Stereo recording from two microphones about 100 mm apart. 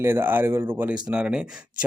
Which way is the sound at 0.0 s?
20° right (ahead or behind).